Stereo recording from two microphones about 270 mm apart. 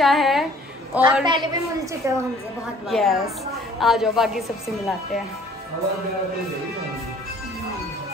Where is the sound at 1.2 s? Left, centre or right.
Centre.